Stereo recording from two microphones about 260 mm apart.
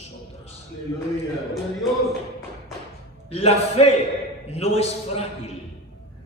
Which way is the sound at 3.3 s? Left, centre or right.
Left.